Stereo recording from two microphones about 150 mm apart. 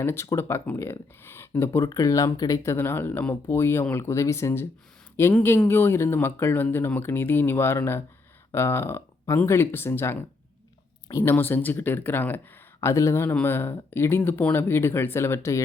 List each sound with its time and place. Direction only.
0.0 s speech: 15° left (ahead or behind)